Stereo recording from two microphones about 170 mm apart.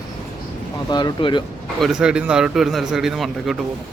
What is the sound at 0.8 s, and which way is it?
Speech, 25° left (ahead or behind).